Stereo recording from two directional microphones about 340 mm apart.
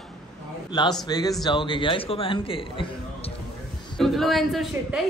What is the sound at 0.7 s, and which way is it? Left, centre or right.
A man's voice, centre.